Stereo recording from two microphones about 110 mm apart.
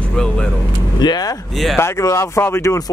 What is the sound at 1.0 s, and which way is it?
Speech, 40° left (ahead or behind).